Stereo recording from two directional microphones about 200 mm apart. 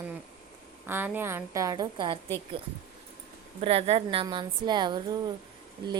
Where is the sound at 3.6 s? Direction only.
30° right (ahead or behind).